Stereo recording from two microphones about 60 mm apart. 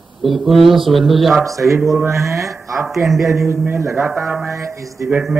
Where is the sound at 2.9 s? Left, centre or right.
Centre.